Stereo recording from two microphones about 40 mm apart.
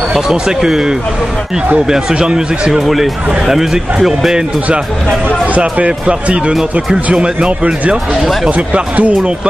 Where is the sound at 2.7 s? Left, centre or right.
Centre.